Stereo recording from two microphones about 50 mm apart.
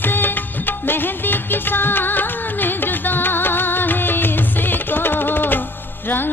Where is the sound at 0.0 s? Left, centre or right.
Left.